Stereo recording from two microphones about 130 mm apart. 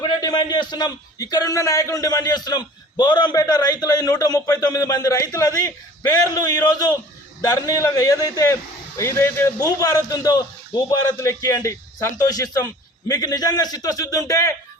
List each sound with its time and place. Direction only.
0.0 s a man's voice: 30° left (ahead or behind)